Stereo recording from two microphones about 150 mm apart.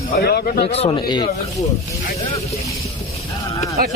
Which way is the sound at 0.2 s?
90° left.